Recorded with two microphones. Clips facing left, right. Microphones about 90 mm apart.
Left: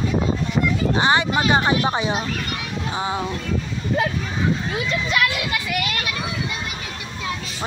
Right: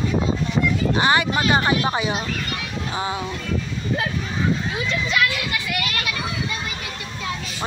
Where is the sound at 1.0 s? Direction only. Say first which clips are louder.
Left 1 dB; 25° left (ahead or behind).